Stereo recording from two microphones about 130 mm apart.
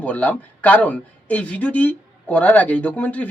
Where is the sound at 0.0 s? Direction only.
10° left (ahead or behind).